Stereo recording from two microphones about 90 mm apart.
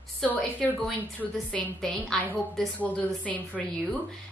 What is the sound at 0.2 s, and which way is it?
A woman's voice, 15° left (ahead or behind).